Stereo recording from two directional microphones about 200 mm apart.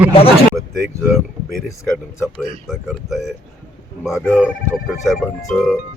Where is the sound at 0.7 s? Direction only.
Centre (ahead or behind).